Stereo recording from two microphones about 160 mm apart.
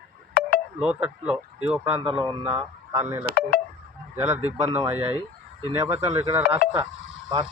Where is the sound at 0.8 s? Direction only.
5° right (ahead or behind).